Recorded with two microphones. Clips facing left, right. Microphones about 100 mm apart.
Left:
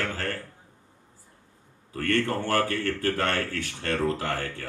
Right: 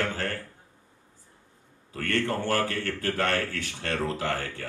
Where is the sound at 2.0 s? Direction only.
20° right (ahead or behind).